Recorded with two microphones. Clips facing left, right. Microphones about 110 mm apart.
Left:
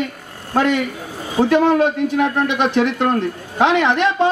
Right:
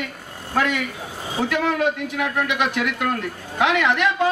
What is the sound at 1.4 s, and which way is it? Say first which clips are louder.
A man's voice: left 7 dB; 30° left (ahead or behind).